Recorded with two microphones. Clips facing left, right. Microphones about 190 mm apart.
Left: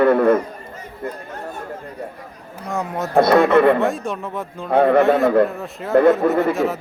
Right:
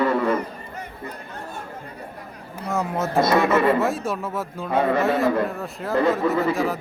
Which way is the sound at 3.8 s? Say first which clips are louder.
Left 2 dB; 5° right (ahead or behind).